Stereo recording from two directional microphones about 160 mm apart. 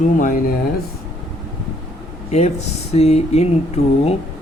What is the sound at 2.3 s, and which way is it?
Speech, 45° left (ahead or behind).